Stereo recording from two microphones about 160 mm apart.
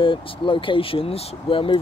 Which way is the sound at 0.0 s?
30° left (ahead or behind).